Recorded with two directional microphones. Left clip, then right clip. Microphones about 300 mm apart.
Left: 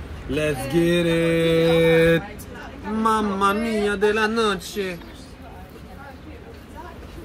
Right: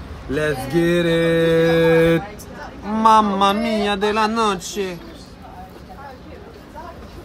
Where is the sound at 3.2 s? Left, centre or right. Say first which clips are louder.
Right 3 dB; right.